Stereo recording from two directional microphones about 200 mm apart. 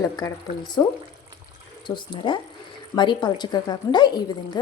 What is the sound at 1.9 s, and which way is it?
A woman's voice, 25° left (ahead or behind).